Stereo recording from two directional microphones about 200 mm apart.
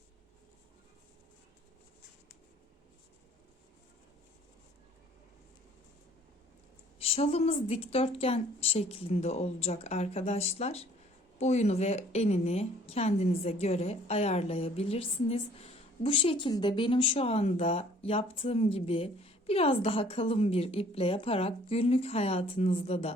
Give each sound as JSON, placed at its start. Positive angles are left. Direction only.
{"t": 7.0, "sound": "a woman's voice", "side_deg": 30}